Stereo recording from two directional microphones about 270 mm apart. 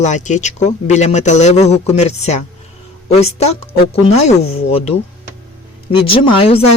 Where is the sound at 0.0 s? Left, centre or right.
Left.